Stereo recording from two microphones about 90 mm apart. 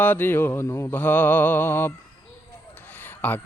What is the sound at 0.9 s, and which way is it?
Speech, 20° left (ahead or behind).